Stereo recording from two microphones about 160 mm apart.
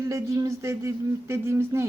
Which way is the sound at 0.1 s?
20° right (ahead or behind).